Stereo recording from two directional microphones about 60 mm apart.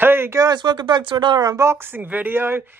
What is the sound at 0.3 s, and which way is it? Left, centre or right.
Speech, right.